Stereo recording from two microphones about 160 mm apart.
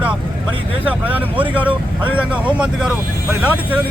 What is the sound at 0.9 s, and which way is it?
Speech, 10° right (ahead or behind).